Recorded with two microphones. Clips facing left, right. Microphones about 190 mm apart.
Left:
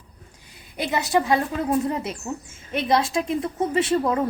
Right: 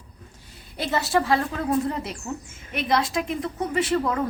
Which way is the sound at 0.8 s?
15° left (ahead or behind).